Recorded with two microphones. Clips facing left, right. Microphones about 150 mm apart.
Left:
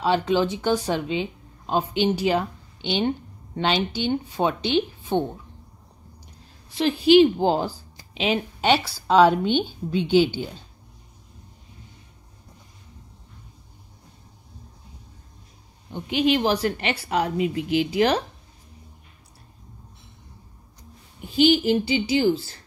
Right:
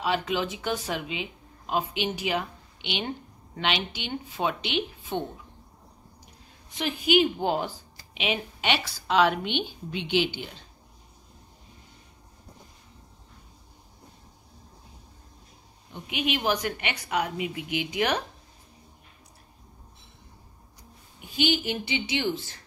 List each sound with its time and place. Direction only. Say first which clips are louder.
0.0 s a woman's voice: left 6 dB; 30° left (ahead or behind)
6.7 s a woman's voice: left 8 dB; 30° left (ahead or behind)
15.9 s a woman's voice: left 8 dB; 30° left (ahead or behind)
21.3 s a woman's voice: left 9 dB; 35° left (ahead or behind)